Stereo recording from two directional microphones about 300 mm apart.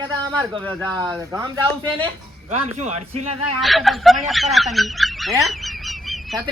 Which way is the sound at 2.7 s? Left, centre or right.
Right.